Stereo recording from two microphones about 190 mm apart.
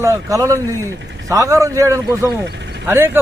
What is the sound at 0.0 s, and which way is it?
A man's voice, 15° right (ahead or behind).